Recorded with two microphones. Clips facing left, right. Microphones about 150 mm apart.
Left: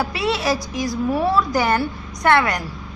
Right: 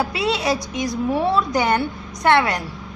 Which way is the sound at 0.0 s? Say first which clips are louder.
Even; 20° right (ahead or behind).